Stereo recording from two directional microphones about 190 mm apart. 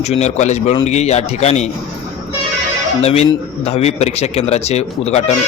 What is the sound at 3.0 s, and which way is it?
Speech, 35° left (ahead or behind).